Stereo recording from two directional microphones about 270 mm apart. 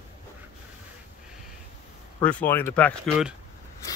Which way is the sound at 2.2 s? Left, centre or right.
Centre.